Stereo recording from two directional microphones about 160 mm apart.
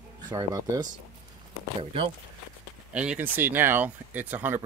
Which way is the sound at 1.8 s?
35° right (ahead or behind).